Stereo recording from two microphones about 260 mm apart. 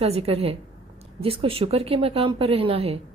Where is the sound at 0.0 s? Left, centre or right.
Right.